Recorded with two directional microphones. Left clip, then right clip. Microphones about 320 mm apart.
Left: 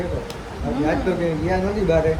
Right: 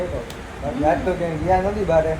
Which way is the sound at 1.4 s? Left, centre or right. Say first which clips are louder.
Right 4 dB; centre.